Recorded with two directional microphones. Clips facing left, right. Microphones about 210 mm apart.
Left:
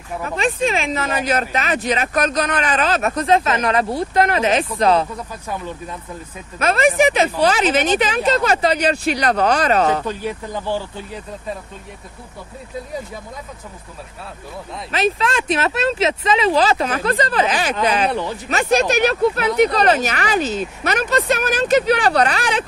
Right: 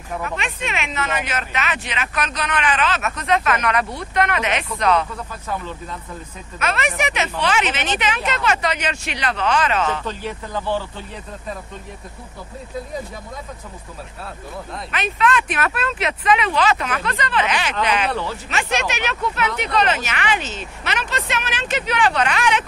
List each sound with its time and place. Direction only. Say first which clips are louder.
0.2 s speech: left 12 dB; 35° left (ahead or behind)
5.1 s speech: even; 15° left (ahead or behind)
6.6 s speech: left 8 dB; 35° left (ahead or behind)
10.0 s speech: left 3 dB; 15° left (ahead or behind)
14.9 s speech: left 2 dB; 30° left (ahead or behind)